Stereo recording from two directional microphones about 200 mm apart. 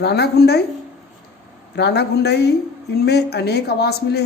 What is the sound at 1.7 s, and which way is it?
Speech, 55° left (ahead or behind).